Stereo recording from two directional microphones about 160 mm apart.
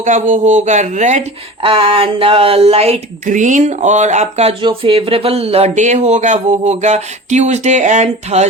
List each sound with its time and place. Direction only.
0.0 s speech: 50° right (ahead or behind)
1.6 s speech: 35° right (ahead or behind)